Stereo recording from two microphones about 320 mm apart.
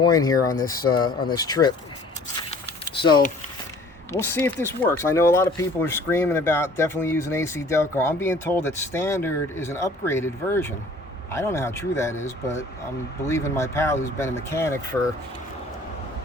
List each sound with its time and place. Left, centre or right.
0.0 s speech: centre
0.5 s speech: left
1.3 s speech: centre
3.0 s speech: centre